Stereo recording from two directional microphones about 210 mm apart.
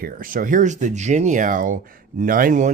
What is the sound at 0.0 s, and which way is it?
Speech, 40° right (ahead or behind).